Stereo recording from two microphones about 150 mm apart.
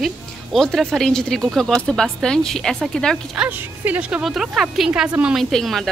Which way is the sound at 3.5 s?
10° right (ahead or behind).